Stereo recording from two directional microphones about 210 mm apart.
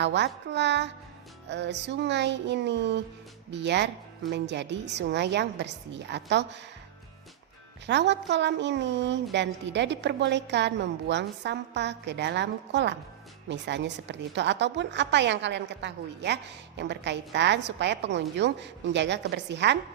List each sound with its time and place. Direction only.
0.0 s a woman's voice: 55° right (ahead or behind)
7.9 s a woman's voice: 55° right (ahead or behind)